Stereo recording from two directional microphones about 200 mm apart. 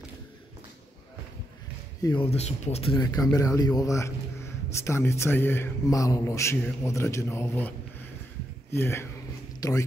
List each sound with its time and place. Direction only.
2.0 s speech: 20° left (ahead or behind)
2.2 s speech: 30° left (ahead or behind); by 7.7 s 10° left (ahead or behind)
8.7 s speech: 10° left (ahead or behind)